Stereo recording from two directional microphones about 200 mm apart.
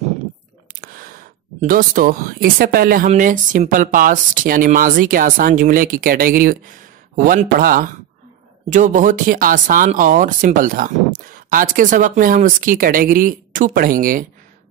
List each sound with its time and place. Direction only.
0.7 s speech: 45° right (ahead or behind)